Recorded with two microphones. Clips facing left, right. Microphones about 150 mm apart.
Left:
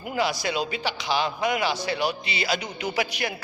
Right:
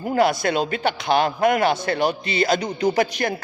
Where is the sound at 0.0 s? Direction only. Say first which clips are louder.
Right 7 dB; 50° right (ahead or behind).